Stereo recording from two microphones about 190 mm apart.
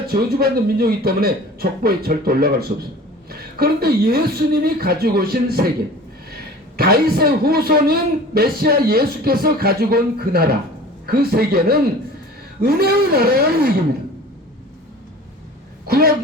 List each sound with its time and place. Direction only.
0.1 s a man's voice: 55° right (ahead or behind)
6.7 s a man's voice: 55° right (ahead or behind)
15.9 s a man's voice: 55° right (ahead or behind)